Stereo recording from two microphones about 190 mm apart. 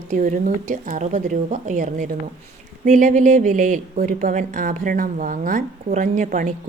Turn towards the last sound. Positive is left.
turn(degrees=-40)  # may be behind; listen again after turning